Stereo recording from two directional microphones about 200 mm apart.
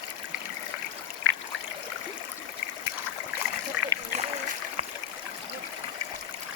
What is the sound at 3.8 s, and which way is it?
Rowboat, 5° right (ahead or behind).